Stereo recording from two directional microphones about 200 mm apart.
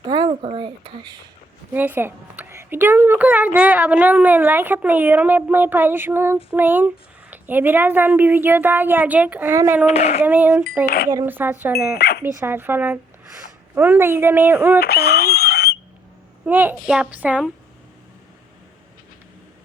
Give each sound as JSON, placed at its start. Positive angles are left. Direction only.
{"t": 0.1, "sound": "a sound", "side_deg": -25}
{"t": 0.4, "sound": "speech", "side_deg": -25}
{"t": 1.7, "sound": "speech", "side_deg": -10}
{"t": 9.8, "sound": "speech", "side_deg": 30}
{"t": 10.2, "sound": "speech", "side_deg": -10}
{"t": 10.8, "sound": "speech", "side_deg": 50}
{"t": 11.1, "sound": "speech", "side_deg": -15}
{"t": 11.9, "sound": "speech", "side_deg": 55}
{"t": 12.4, "sound": "speech", "side_deg": -10}
{"t": 14.8, "sound": "a sound", "side_deg": 50}
{"t": 16.5, "sound": "speech", "side_deg": -10}